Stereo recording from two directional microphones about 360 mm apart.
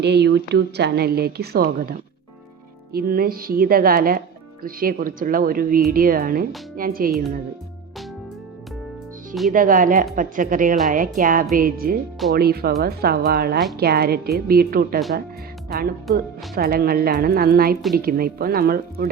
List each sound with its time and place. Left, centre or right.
0.0 s a woman's voice: right
9.5 s a woman's voice: right
16.6 s a woman's voice: right